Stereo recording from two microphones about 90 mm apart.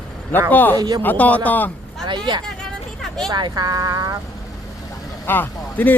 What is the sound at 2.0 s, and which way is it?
Speech, 60° right (ahead or behind).